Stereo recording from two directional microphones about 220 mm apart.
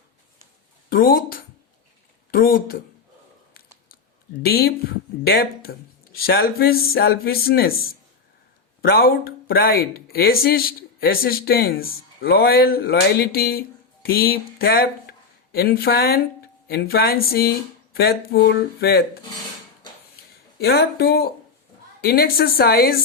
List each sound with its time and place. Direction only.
0.9 s speech: 40° left (ahead or behind)
4.4 s speech: 45° left (ahead or behind)
8.8 s speech: 45° left (ahead or behind)
20.6 s speech: 45° left (ahead or behind)